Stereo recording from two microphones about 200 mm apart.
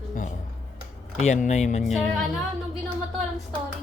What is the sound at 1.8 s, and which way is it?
Speech, centre (ahead or behind).